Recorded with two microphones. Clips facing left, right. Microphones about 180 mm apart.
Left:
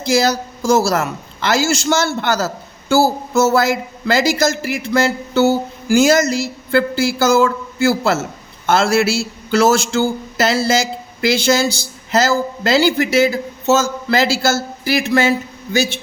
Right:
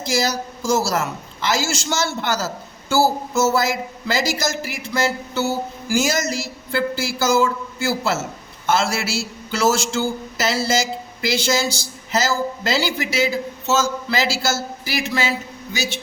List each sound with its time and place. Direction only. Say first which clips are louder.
0.0 s a man's voice: left 6 dB; 60° left (ahead or behind)